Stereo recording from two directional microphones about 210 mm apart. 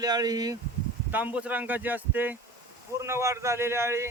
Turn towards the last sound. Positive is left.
turn(degrees=-10)  # may be behind; listen again after turning